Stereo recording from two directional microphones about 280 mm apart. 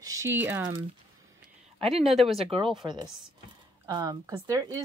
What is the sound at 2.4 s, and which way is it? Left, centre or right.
Speech, centre.